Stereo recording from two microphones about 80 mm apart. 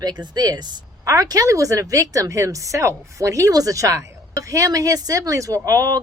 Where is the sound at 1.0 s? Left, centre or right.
Right.